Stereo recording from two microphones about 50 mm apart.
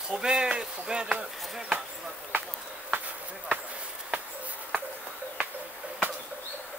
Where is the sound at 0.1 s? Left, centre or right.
Centre.